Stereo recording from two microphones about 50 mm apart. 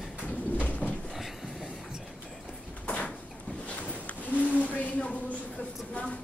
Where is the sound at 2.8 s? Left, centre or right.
Left.